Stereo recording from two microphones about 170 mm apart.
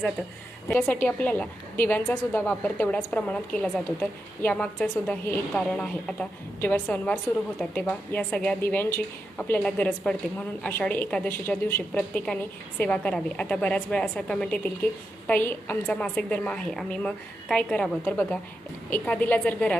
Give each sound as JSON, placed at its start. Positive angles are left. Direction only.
{"t": 0.7, "sound": "a woman's voice", "side_deg": 10}